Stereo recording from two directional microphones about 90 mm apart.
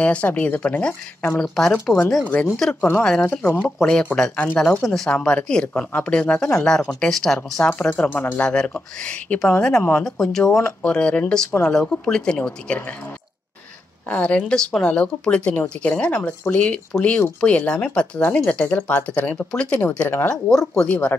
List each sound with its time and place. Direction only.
0.0 s speech: 15° left (ahead or behind)
3.0 s speech: 5° left (ahead or behind)
3.3 s speech: 25° left (ahead or behind)
3.6 s speech: 10° left (ahead or behind)
4.8 s speech: 5° left (ahead or behind)
7.9 s speech: 20° left (ahead or behind)
14.0 s speech: 15° left (ahead or behind)
20.2 s speech: 5° left (ahead or behind)